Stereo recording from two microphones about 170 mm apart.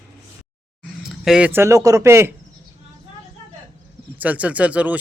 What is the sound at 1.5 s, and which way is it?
Speech, 15° right (ahead or behind).